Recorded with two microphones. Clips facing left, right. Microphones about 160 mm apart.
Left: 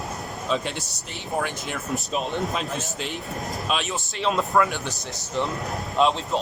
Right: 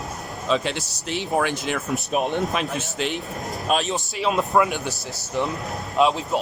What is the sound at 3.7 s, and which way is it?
Speech, 40° right (ahead or behind).